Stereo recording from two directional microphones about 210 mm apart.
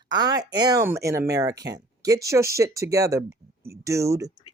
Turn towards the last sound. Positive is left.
turn(degrees=-15)  # may be behind; listen again after turning